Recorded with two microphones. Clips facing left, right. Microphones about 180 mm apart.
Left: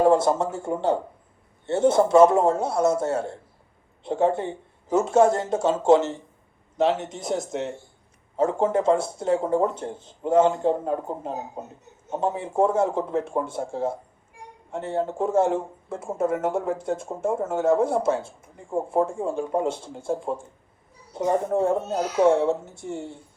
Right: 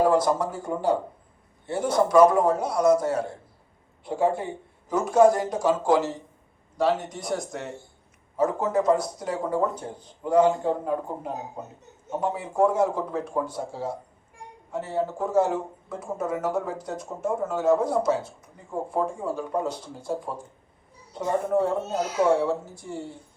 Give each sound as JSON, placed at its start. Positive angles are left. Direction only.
{"t": 0.0, "sound": "speech", "side_deg": 25}